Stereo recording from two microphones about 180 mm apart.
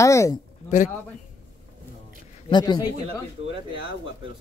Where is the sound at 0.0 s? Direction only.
15° left (ahead or behind).